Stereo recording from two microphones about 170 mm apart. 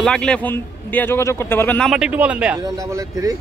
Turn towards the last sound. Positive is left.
turn(degrees=-20)  # may be behind; listen again after turning